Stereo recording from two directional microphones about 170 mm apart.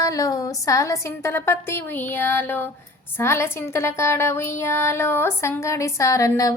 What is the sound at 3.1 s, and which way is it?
A woman's voice, 15° left (ahead or behind).